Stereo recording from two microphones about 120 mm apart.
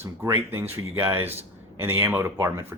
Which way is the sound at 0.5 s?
20° right (ahead or behind).